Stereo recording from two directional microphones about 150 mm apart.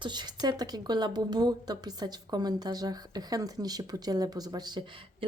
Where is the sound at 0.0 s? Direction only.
30° right (ahead or behind).